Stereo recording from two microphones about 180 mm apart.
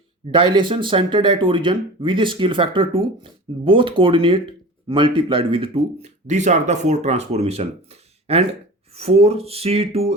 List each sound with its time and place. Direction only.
0.3 s speech: 25° right (ahead or behind)